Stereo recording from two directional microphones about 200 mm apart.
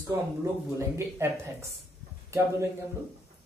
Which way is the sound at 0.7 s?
15° right (ahead or behind).